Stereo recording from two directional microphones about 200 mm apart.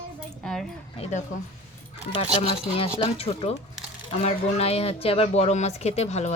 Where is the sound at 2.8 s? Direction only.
30° left (ahead or behind).